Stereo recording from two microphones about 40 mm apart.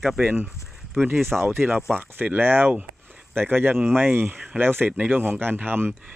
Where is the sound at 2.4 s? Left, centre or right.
Right.